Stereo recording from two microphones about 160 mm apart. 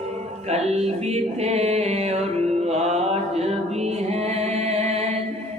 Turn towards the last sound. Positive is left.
turn(degrees=-40)  # may be behind; listen again after turning